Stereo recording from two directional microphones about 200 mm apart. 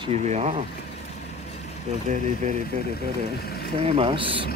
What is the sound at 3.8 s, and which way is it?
Speech, 30° right (ahead or behind).